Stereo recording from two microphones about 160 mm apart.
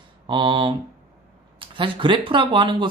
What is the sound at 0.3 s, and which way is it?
A man's voice, 30° right (ahead or behind).